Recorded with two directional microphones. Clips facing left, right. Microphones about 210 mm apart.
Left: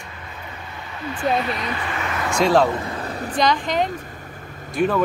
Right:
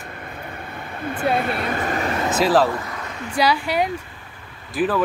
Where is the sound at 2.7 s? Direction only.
30° left (ahead or behind).